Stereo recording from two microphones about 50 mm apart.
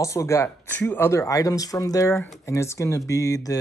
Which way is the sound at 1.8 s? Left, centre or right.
Left.